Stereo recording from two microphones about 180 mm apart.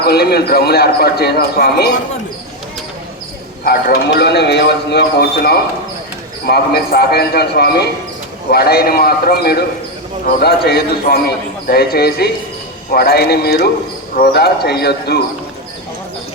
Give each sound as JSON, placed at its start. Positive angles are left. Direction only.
{"t": 0.0, "sound": "speech", "side_deg": 60}
{"t": 3.6, "sound": "speech", "side_deg": 60}